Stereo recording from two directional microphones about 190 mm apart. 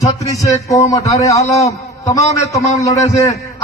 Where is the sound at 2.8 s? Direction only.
15° left (ahead or behind).